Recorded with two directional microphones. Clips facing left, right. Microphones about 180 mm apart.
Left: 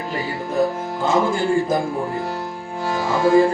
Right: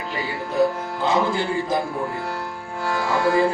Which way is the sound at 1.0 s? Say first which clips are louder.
Left 2 dB; 45° left (ahead or behind).